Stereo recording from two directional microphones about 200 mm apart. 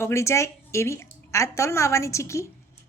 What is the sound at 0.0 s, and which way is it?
A woman's voice, 15° left (ahead or behind).